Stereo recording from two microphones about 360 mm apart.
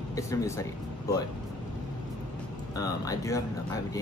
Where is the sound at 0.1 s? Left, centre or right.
Centre.